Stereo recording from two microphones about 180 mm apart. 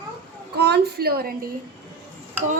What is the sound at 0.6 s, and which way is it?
Speech, 65° right (ahead or behind).